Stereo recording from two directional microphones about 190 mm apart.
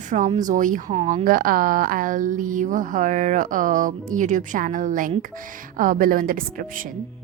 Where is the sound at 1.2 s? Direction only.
50° right (ahead or behind).